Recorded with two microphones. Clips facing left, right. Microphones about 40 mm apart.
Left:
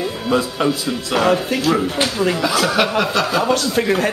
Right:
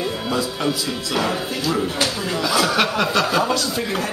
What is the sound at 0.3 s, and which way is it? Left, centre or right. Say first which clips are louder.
Speech: left 8 dB; left.